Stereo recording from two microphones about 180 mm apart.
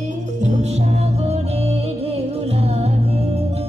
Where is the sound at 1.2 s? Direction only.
35° right (ahead or behind).